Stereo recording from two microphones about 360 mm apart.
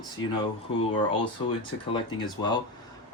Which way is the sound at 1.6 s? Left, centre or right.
Centre.